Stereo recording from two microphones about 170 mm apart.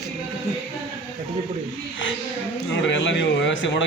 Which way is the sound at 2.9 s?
90° left.